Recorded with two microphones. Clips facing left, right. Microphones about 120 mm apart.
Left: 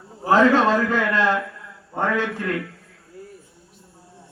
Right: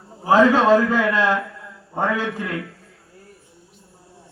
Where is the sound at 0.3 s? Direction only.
5° right (ahead or behind).